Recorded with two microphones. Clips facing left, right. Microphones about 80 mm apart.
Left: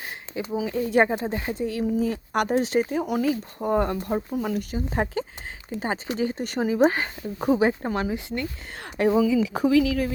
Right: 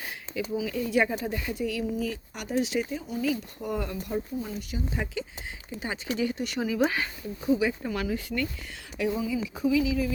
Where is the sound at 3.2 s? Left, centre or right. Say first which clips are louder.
Left 5 dB; left.